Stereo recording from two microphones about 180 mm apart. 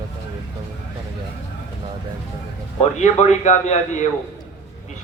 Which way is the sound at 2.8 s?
40° left (ahead or behind).